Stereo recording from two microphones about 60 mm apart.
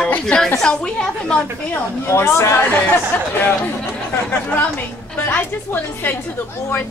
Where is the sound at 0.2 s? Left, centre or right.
Centre.